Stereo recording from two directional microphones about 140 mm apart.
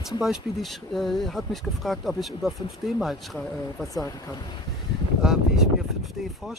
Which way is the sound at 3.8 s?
25° left (ahead or behind).